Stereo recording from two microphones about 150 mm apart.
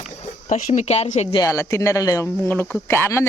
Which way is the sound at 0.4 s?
55° left (ahead or behind).